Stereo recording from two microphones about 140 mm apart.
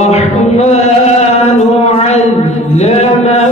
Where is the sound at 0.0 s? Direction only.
50° left (ahead or behind).